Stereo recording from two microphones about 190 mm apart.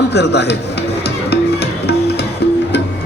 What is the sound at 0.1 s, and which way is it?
Speech, 60° left (ahead or behind).